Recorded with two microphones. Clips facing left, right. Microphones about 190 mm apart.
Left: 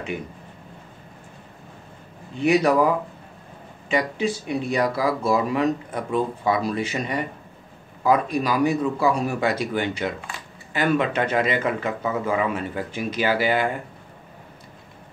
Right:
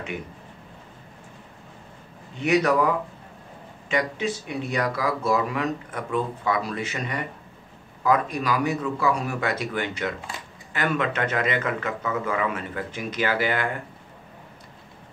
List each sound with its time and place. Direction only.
2.4 s speech: 30° left (ahead or behind)
3.9 s a man's voice: 35° left (ahead or behind)